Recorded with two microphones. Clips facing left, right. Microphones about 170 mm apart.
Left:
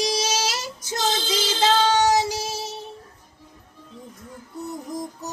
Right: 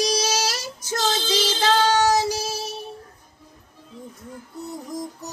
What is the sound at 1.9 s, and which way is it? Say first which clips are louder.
Child singing: even; 20° left (ahead or behind).